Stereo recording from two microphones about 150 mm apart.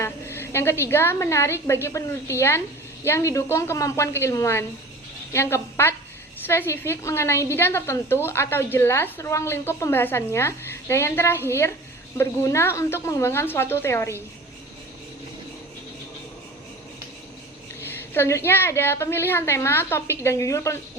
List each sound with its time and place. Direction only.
0.0 s a woman's voice: 15° left (ahead or behind)
17.8 s a woman's voice: 15° left (ahead or behind)